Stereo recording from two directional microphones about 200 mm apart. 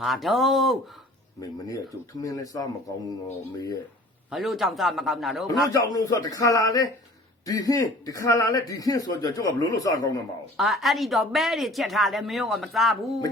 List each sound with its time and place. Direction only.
0.0 s speech: centre (ahead or behind)
1.4 s a man's voice: 20° left (ahead or behind)
4.3 s speech: centre (ahead or behind)
5.6 s a man's voice: 20° left (ahead or behind)
10.6 s speech: centre (ahead or behind)